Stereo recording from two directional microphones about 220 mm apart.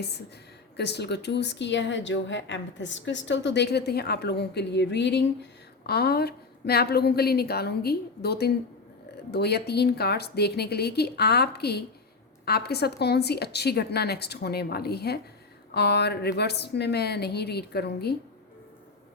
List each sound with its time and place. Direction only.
0.8 s speech: 50° left (ahead or behind)